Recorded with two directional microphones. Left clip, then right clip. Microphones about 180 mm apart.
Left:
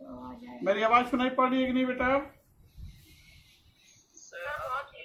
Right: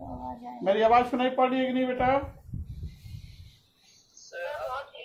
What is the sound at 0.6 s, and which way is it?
A man's voice, 25° right (ahead or behind).